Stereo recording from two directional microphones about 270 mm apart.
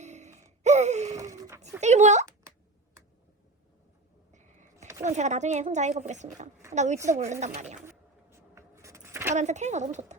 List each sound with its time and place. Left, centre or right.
0.0 s gasp: right
1.1 s a sound: centre
1.8 s speech: right
4.3 s vehicle: right
5.0 s speech: right
7.8 s a sound: centre
9.3 s speech: right